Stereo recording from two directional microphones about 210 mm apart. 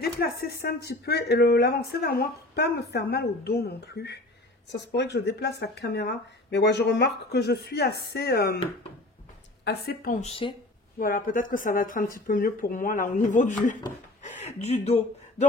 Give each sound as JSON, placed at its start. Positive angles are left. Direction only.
{"t": 0.0, "sound": "speech", "side_deg": 45}
{"t": 9.7, "sound": "speech", "side_deg": 45}
{"t": 11.0, "sound": "speech", "side_deg": 40}